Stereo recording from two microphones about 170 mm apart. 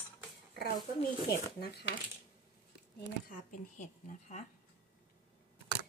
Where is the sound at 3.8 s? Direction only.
45° left (ahead or behind).